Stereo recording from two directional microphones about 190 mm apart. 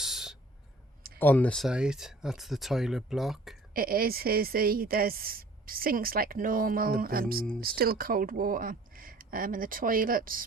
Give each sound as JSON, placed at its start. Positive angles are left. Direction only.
{"t": 0.0, "sound": "a sound", "side_deg": 0}
{"t": 1.2, "sound": "speech", "side_deg": 10}
{"t": 3.8, "sound": "a woman's voice", "side_deg": -50}